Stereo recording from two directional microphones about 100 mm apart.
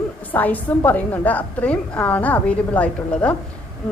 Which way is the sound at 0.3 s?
15° left (ahead or behind).